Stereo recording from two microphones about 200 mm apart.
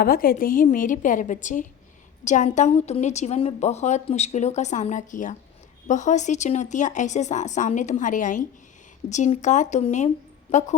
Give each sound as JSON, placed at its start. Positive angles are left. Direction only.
{"t": 0.0, "sound": "a woman's voice", "side_deg": 45}